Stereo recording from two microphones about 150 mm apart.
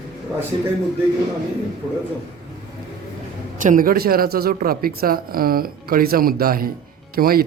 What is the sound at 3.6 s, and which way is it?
Speech, 65° right (ahead or behind).